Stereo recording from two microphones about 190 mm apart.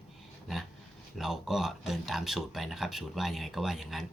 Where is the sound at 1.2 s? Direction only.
Centre (ahead or behind).